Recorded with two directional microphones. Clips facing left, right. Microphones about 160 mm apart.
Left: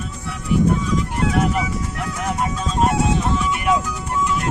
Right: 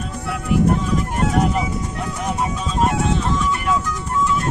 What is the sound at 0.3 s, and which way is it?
Music, 55° right (ahead or behind).